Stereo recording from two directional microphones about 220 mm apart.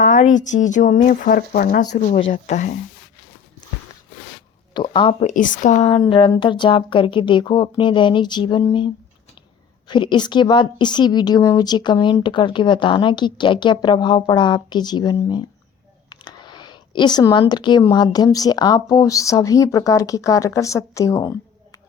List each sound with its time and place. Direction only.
0.0 s speech: 35° left (ahead or behind)
4.7 s speech: 20° left (ahead or behind)
5.3 s speech: 35° left (ahead or behind); by 8.9 s 20° left (ahead or behind)
9.9 s speech: 20° left (ahead or behind)